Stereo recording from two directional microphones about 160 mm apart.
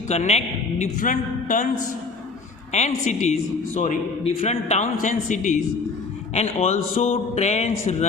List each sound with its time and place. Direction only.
0.1 s a man's voice: 45° left (ahead or behind)
2.7 s a man's voice: 45° left (ahead or behind)
6.3 s a man's voice: 40° left (ahead or behind)